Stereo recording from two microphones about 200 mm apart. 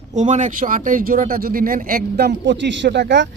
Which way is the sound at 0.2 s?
35° right (ahead or behind).